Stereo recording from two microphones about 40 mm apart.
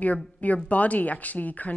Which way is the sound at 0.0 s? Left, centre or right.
Left.